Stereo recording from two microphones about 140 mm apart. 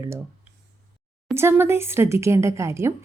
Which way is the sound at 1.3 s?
15° right (ahead or behind).